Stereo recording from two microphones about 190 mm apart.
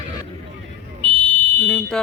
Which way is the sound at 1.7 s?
5° left (ahead or behind).